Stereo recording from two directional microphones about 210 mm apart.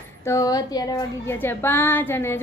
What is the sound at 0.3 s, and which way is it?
A woman's voice, 15° left (ahead or behind).